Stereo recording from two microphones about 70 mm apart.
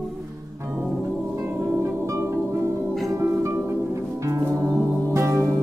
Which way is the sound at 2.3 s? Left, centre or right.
Right.